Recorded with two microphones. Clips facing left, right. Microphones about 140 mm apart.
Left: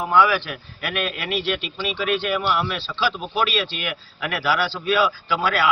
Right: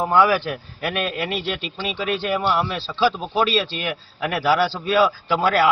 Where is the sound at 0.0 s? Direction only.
30° right (ahead or behind).